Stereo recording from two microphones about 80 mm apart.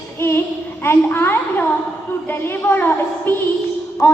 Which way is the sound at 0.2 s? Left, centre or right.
Left.